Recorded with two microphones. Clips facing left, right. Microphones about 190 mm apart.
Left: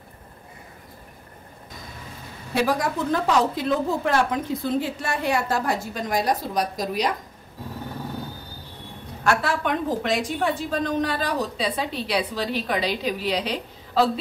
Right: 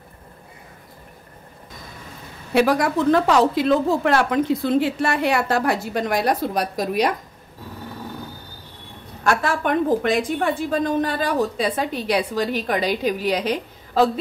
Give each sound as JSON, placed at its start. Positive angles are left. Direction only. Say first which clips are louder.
{"t": 2.5, "sound": "a woman's voice", "louder": "right 5 dB", "side_deg": -70}
{"t": 9.4, "sound": "a woman's voice", "louder": "right 4 dB", "side_deg": -50}